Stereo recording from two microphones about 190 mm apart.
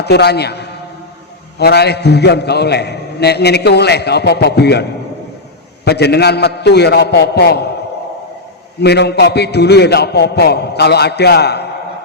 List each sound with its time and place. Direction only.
0.0 s a man's voice: 60° left (ahead or behind)
8.8 s a man's voice: 60° left (ahead or behind)